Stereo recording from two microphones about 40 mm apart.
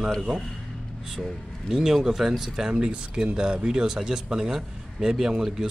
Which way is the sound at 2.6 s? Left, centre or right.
Right.